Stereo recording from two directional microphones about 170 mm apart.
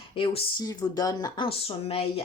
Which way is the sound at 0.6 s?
20° left (ahead or behind).